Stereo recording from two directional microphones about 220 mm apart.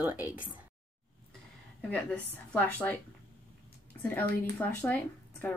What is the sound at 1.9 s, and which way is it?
Speech, 5° left (ahead or behind).